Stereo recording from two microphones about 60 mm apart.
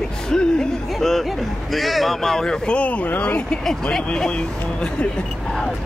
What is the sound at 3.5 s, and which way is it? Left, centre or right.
Speech, centre.